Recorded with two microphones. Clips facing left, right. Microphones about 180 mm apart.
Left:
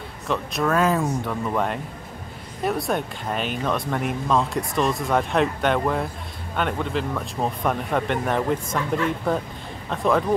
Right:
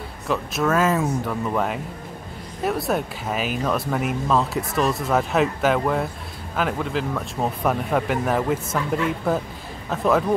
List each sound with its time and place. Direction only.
0.3 s speech: centre (ahead or behind)